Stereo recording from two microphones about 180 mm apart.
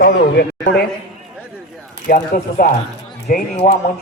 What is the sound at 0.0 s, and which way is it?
Speech, 65° left (ahead or behind).